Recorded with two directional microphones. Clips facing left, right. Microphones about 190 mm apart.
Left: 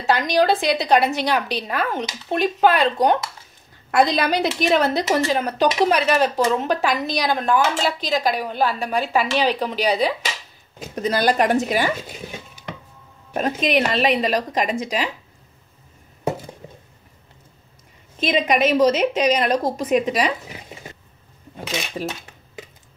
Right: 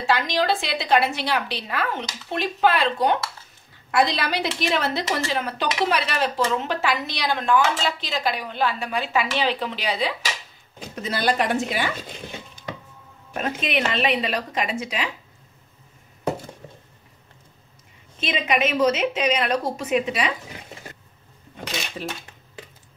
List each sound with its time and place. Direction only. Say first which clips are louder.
0.0 s a woman's voice: left 4 dB; 45° left (ahead or behind)
13.3 s speech: left 6 dB; 40° left (ahead or behind)
18.2 s speech: left 5 dB; 40° left (ahead or behind)